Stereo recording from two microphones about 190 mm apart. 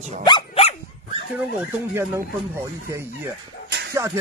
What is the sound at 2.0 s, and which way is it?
Music, 15° right (ahead or behind).